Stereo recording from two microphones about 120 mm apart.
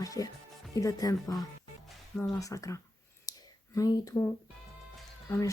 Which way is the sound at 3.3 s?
30° left (ahead or behind).